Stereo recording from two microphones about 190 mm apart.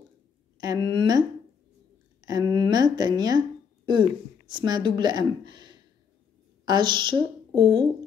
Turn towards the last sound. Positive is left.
turn(degrees=5)  # may be behind; listen again after turning